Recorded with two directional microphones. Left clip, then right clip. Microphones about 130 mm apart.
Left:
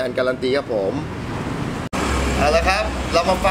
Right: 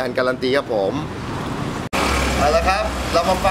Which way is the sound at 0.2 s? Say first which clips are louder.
Right 2 dB; 30° right (ahead or behind).